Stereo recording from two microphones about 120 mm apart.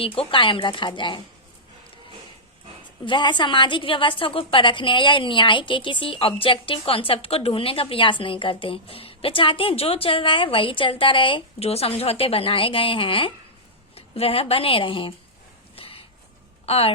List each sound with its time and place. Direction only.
0.0 s a woman's voice: 50° left (ahead or behind)
3.1 s a woman's voice: 40° left (ahead or behind)
15.7 s a sound: 50° left (ahead or behind)
16.6 s speech: 55° left (ahead or behind)